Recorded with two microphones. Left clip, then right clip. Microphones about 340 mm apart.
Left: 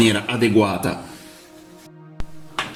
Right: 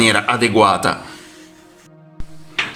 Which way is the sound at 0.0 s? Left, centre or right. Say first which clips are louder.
Right 4 dB; right.